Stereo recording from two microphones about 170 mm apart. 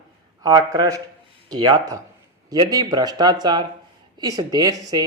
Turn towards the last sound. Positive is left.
turn(degrees=-20)  # may be behind; listen again after turning